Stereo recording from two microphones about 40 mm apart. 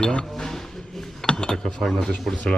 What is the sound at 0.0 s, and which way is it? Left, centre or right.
Speech, left.